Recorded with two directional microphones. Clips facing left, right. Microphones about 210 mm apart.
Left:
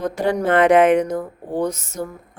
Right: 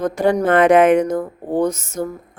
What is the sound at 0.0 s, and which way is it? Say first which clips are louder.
Speech: right 3 dB; 45° right (ahead or behind).